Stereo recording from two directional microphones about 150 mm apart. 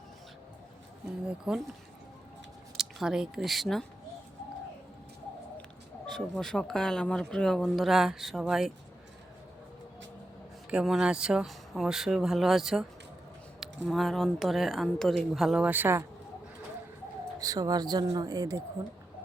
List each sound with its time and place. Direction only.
1.3 s speech: 5° right (ahead or behind)
2.7 s speech: 5° right (ahead or behind)
6.1 s speech: 5° left (ahead or behind)
10.7 s speech: 5° right (ahead or behind)
17.4 s speech: 25° right (ahead or behind)